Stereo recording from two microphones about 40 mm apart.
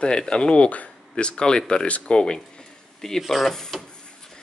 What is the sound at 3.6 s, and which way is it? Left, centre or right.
Rub, centre.